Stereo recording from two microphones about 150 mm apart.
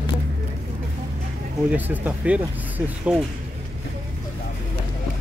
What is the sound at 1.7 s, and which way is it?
Speech, 10° right (ahead or behind).